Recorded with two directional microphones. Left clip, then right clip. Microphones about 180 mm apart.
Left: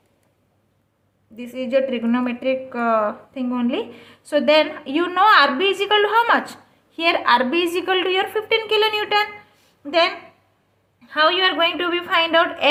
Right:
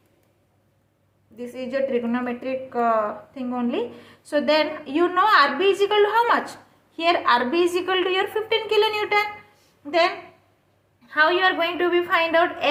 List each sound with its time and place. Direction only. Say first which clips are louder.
1.4 s a woman's voice: left 5 dB; 45° left (ahead or behind)
11.0 s a woman's voice: left 2 dB; 45° left (ahead or behind)